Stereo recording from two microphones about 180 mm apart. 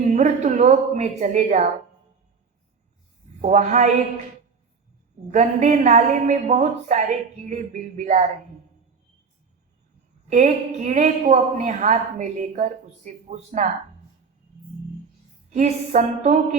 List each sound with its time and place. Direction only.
0.1 s speech: 40° right (ahead or behind)
3.4 s a woman's voice: 40° right (ahead or behind)
5.3 s a woman's voice: 40° right (ahead or behind)
10.2 s a woman's voice: 40° right (ahead or behind)
15.4 s a woman's voice: 40° right (ahead or behind)